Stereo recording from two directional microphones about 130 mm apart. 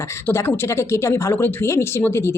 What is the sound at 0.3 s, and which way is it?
Speech, 15° left (ahead or behind).